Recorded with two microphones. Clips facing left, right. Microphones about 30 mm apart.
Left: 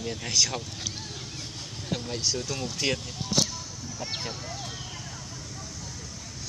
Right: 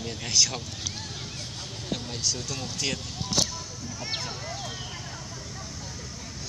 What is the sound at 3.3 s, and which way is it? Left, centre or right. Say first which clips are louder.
Speech: left 1 dB; right.